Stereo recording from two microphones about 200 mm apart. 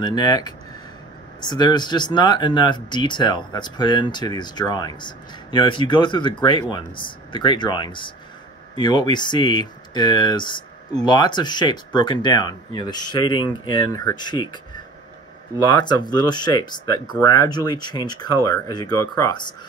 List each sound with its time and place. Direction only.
0.0 s speech: 20° left (ahead or behind)
15.6 s speech: 20° left (ahead or behind)